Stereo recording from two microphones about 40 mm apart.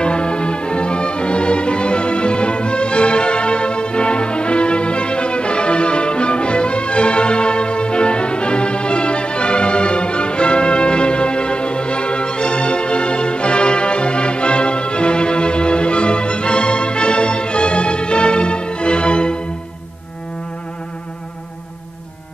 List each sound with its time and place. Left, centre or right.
0.0 s music: left